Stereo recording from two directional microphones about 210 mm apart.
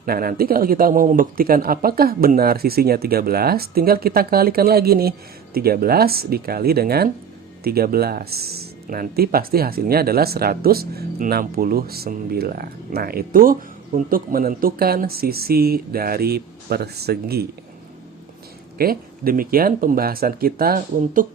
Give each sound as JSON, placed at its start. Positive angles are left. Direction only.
{"t": 0.0, "sound": "speech", "side_deg": -45}
{"t": 18.8, "sound": "speech", "side_deg": -45}